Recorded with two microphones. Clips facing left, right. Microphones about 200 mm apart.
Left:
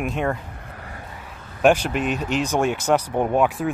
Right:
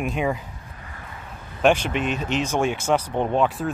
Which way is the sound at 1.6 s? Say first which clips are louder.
Left 2 dB; 5° left (ahead or behind).